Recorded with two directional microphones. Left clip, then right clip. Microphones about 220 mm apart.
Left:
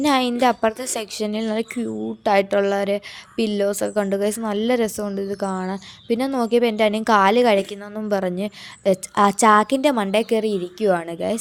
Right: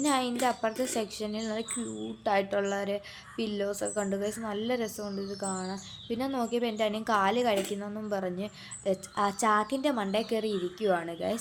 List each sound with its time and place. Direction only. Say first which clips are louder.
0.0 s a woman's voice: left 10 dB; 40° left (ahead or behind)